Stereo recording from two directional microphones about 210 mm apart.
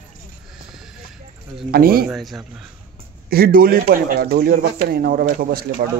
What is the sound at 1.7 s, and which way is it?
Speech, 45° right (ahead or behind).